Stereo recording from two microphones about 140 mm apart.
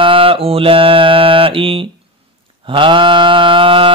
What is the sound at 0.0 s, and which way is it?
Mantra, 40° right (ahead or behind).